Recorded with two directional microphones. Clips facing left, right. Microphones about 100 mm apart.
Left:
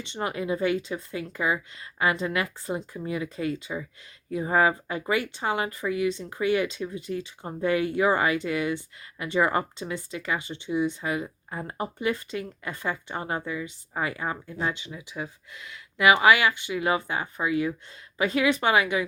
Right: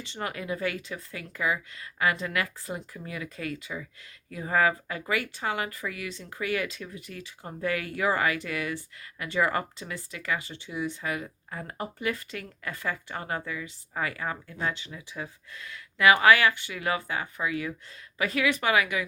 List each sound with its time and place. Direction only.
0.0 s speech: 25° left (ahead or behind)